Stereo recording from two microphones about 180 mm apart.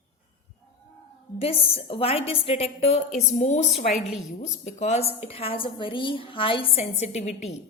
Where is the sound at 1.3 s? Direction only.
30° left (ahead or behind).